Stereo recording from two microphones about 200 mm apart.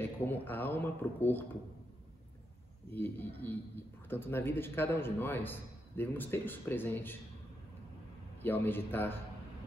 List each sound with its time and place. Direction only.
0.0 s a man's voice: 10° left (ahead or behind)
2.9 s a man's voice: 10° left (ahead or behind)
8.4 s a man's voice: 10° left (ahead or behind)